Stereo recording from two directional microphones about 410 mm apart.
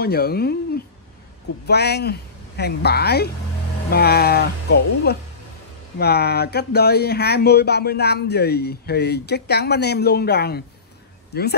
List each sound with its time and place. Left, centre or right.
0.0 s speech: left
1.7 s speech: left